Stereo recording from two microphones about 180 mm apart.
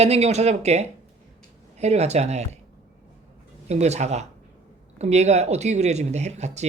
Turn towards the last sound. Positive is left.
turn(degrees=-40)  # may be behind; listen again after turning